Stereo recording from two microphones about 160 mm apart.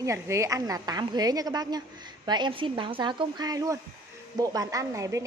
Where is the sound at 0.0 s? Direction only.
20° right (ahead or behind).